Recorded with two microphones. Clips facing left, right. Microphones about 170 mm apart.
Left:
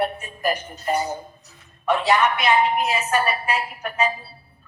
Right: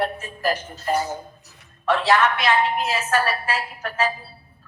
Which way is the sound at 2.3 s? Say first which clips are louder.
Left 1 dB; centre (ahead or behind).